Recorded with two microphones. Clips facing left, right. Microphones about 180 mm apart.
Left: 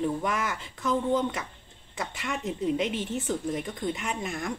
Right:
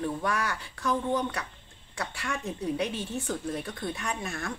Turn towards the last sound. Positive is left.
turn(degrees=15)  # may be behind; listen again after turning